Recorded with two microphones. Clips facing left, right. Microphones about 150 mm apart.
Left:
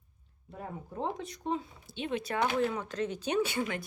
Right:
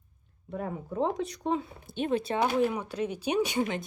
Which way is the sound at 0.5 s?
90° right.